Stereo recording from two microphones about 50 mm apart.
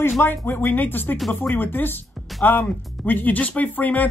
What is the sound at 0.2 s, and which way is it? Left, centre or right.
A woman's voice, left.